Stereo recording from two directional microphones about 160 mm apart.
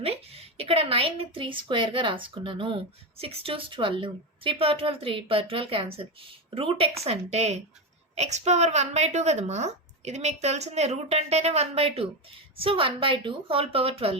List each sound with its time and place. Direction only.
0.0 s a woman's voice: 40° right (ahead or behind)